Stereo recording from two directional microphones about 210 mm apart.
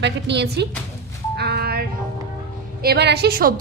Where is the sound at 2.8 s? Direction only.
50° right (ahead or behind).